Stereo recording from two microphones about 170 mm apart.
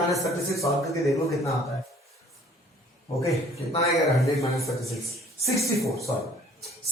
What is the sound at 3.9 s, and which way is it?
A man's voice, 20° left (ahead or behind).